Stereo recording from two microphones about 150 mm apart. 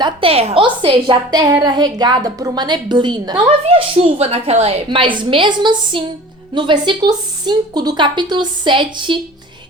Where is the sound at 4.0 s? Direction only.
40° right (ahead or behind).